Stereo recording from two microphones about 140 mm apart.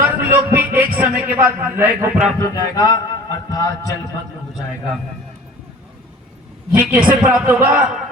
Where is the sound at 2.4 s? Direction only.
25° left (ahead or behind).